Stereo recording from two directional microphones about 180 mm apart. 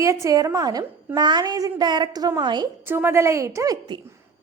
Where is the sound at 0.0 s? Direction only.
15° right (ahead or behind).